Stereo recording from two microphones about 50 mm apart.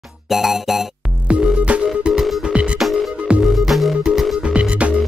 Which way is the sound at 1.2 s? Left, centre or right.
Right.